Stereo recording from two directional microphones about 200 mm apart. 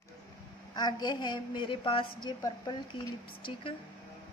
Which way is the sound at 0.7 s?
20° left (ahead or behind).